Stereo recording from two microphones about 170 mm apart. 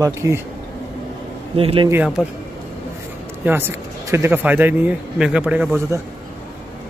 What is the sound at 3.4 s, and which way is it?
Speech, 10° right (ahead or behind).